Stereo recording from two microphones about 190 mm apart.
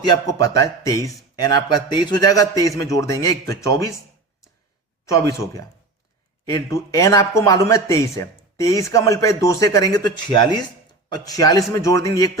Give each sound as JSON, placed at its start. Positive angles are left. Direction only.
{"t": 0.1, "sound": "a man's voice", "side_deg": 20}
{"t": 5.0, "sound": "a man's voice", "side_deg": 15}